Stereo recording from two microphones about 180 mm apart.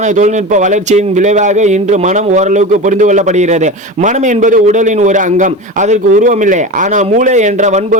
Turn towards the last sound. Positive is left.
turn(degrees=-40)  # may be behind; listen again after turning